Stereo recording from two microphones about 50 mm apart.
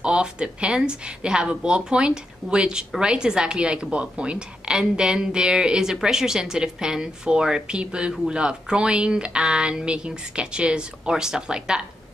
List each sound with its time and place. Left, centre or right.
0.0 s speech: centre